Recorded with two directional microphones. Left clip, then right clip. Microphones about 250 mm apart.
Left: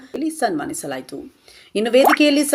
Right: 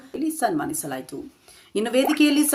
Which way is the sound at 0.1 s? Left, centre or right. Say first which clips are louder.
Left 3 dB; centre.